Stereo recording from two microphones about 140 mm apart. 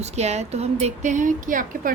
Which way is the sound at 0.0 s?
50° right (ahead or behind).